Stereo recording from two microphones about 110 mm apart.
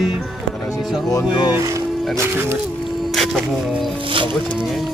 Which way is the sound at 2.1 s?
20° right (ahead or behind).